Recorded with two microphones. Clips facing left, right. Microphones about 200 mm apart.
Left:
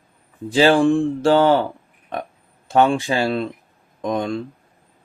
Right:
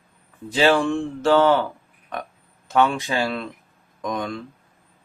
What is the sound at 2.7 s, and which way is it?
Speech, 30° left (ahead or behind).